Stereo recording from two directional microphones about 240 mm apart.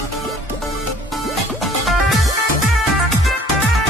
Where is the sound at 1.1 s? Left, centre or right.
Centre.